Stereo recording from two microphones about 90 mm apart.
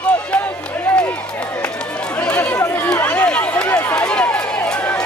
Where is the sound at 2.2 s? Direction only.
15° left (ahead or behind).